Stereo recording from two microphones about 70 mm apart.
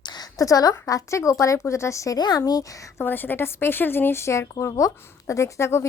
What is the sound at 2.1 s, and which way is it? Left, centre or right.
Speech, left.